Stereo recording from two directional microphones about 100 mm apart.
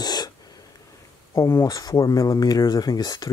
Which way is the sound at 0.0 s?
40° left (ahead or behind).